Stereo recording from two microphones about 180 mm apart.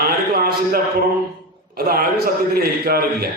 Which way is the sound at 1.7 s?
55° right (ahead or behind).